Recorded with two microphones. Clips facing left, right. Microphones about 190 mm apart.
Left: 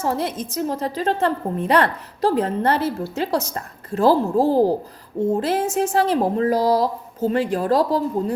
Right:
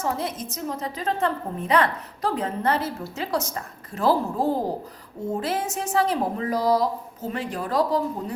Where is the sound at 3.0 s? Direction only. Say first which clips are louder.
Left 5 dB; 30° left (ahead or behind).